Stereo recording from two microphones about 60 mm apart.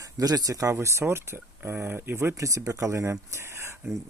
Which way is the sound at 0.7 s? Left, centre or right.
Right.